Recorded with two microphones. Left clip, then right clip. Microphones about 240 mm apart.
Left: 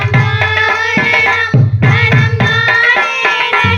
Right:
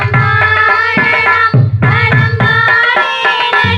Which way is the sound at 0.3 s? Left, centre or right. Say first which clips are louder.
Right 3 dB; right.